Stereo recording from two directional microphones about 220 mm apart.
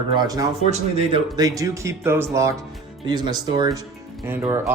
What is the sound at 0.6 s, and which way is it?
Speech, 25° right (ahead or behind).